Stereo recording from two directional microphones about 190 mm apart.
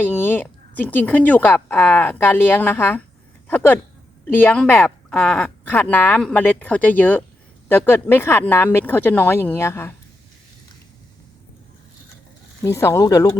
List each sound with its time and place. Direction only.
0.0 s a woman's voice: 10° left (ahead or behind)
12.6 s a woman's voice: 15° left (ahead or behind)